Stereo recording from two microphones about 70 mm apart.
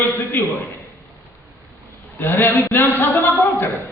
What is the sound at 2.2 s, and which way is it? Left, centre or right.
Speech, left.